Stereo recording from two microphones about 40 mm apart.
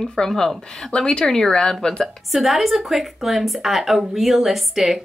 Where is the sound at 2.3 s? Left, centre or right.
Centre.